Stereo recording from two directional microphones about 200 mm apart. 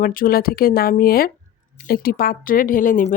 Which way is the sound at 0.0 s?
45° left (ahead or behind).